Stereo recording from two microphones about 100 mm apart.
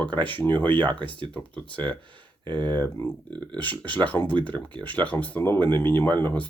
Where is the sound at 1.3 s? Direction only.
15° left (ahead or behind).